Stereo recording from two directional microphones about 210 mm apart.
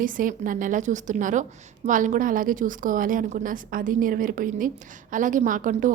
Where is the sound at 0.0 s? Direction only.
40° right (ahead or behind).